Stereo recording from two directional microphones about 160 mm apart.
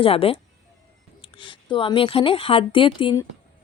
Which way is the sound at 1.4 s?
30° left (ahead or behind).